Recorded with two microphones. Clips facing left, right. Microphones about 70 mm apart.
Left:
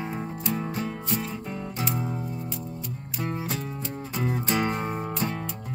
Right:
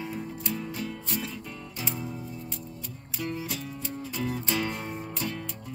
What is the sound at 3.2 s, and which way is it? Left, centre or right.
Music, left.